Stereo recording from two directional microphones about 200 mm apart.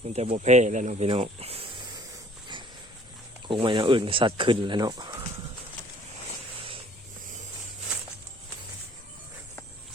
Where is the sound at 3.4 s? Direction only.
25° right (ahead or behind).